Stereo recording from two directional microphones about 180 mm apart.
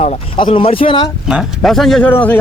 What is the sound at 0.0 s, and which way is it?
Speech, 30° left (ahead or behind).